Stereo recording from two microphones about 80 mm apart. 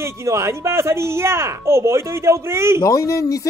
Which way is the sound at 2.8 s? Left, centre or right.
Left.